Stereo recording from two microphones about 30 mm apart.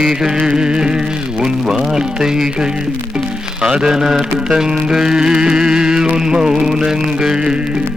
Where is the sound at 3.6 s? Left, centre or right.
Right.